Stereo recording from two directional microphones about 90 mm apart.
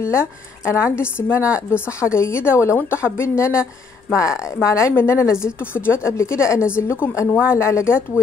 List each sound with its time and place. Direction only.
0.0 s a woman's voice: 30° left (ahead or behind)